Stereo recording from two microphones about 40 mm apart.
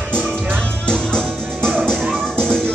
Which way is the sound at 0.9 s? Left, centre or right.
Left.